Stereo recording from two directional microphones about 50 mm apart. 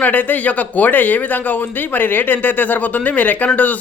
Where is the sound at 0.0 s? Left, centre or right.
Left.